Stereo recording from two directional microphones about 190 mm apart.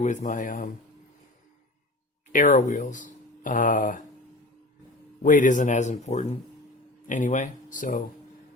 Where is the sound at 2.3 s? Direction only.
40° left (ahead or behind).